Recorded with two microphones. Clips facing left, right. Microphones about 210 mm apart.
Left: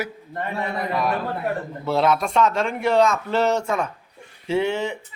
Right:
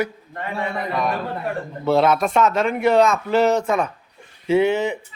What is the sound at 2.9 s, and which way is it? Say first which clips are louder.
Speech: right 2 dB; 15° right (ahead or behind).